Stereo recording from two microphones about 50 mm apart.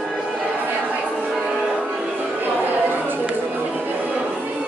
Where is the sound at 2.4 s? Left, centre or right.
Right.